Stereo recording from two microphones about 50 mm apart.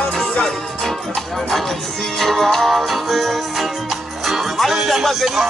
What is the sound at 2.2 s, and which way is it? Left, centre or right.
Music, centre.